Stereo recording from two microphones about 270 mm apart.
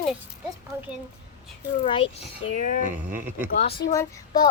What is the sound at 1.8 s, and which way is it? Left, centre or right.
A child's voice, centre.